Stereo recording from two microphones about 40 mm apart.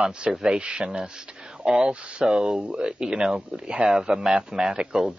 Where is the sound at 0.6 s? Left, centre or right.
Right.